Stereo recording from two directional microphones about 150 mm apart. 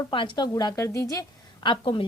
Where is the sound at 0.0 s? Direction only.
35° left (ahead or behind).